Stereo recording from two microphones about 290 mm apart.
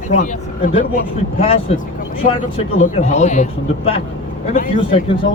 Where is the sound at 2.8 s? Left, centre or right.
Left.